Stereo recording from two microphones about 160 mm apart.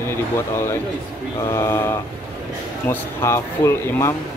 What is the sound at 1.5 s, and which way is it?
Speech, 15° left (ahead or behind).